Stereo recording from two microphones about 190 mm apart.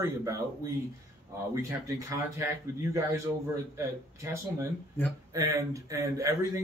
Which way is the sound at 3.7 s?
15° right (ahead or behind).